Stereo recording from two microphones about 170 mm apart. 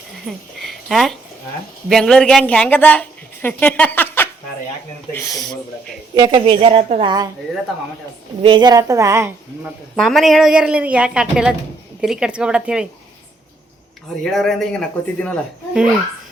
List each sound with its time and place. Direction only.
0.6 s a sound: centre (ahead or behind)
1.9 s a woman's voice: 5° left (ahead or behind)
6.1 s a woman's voice: 25° right (ahead or behind)
8.4 s a woman's voice: 30° right (ahead or behind)
9.9 s a woman's voice: centre (ahead or behind)
14.3 s a woman's voice: centre (ahead or behind)